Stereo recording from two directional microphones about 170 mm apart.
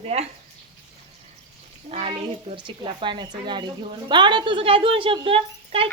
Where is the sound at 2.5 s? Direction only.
30° right (ahead or behind).